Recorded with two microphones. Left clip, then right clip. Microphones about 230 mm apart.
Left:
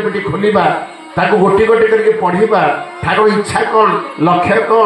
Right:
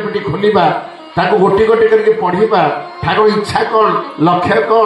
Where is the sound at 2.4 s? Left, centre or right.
Right.